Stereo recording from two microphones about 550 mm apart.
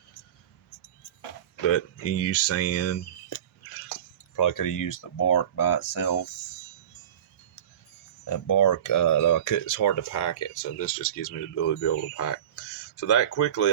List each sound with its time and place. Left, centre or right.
1.6 s speech: left
4.4 s speech: left
8.2 s speech: left